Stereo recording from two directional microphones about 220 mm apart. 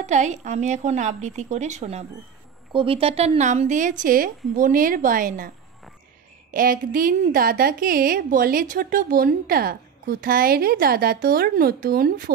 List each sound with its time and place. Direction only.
0.0 s a woman's voice: 30° right (ahead or behind)
6.5 s a woman's voice: 40° right (ahead or behind)